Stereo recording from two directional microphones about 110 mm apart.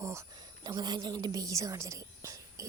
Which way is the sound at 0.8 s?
40° right (ahead or behind).